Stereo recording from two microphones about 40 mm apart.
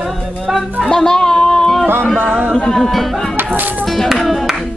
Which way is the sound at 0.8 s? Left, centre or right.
Centre.